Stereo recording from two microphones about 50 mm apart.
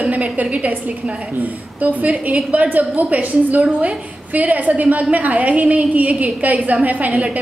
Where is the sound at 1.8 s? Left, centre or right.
Right.